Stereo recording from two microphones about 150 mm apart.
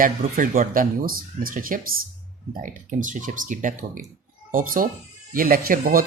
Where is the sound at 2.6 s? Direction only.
60° right (ahead or behind).